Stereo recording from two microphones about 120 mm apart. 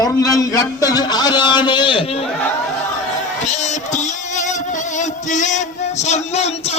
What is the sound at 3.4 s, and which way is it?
Music, 75° left (ahead or behind).